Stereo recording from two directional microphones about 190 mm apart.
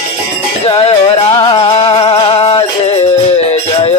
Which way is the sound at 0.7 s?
30° left (ahead or behind).